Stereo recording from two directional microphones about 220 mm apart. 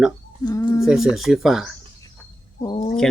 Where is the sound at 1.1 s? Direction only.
Centre (ahead or behind).